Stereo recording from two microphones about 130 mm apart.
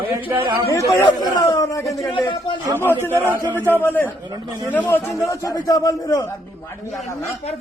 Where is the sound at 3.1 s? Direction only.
20° right (ahead or behind).